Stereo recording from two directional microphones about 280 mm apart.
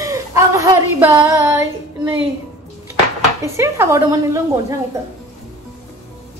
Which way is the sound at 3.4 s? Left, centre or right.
Centre.